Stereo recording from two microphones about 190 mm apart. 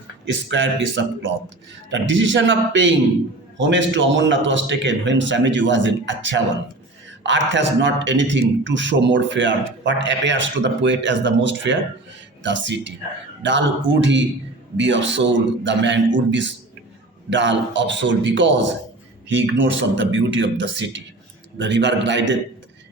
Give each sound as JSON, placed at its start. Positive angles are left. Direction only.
{"t": 0.4, "sound": "a man's voice", "side_deg": -75}